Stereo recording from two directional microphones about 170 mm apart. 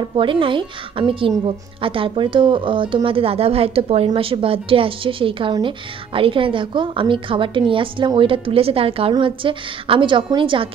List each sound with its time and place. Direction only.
0.1 s speech: 30° right (ahead or behind)